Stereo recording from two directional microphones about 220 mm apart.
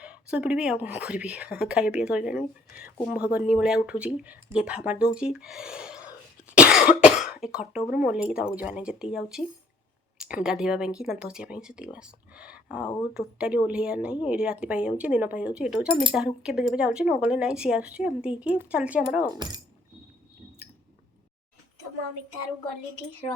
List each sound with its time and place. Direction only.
0.0 s speech: 5° right (ahead or behind)
5.1 s cough: 5° right (ahead or behind)
7.9 s speech: 5° right (ahead or behind)
19.4 s speech: 20° right (ahead or behind)